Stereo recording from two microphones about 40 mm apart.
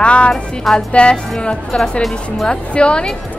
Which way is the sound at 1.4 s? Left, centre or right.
Left.